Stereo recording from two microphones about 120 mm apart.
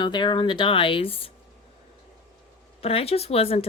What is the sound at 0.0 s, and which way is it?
A woman's voice, 40° left (ahead or behind).